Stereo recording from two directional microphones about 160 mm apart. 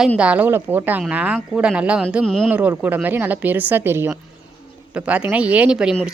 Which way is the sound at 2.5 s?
10° right (ahead or behind).